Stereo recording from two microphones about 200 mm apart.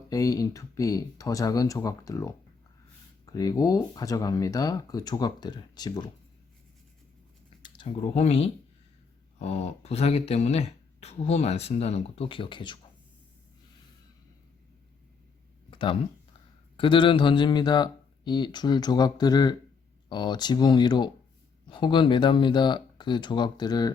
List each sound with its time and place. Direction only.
0.1 s a man's voice: 15° left (ahead or behind)
7.6 s speech: 25° left (ahead or behind)
15.7 s a sound: 25° left (ahead or behind)
16.7 s a man's voice: 25° left (ahead or behind)